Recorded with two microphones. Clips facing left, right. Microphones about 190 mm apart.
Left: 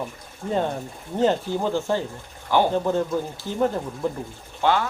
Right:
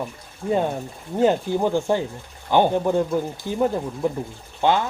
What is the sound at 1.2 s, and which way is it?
Speech, 15° right (ahead or behind).